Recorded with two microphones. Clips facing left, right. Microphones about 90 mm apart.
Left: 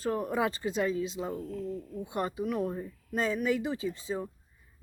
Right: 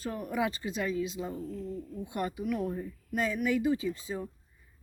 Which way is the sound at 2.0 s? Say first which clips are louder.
Left 1 dB; 30° left (ahead or behind).